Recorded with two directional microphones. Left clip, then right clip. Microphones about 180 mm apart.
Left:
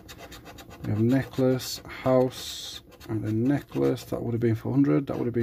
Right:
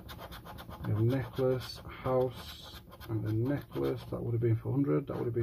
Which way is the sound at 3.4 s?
40° left (ahead or behind).